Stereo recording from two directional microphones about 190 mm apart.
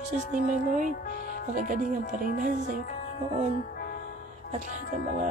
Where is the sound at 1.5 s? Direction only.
45° right (ahead or behind).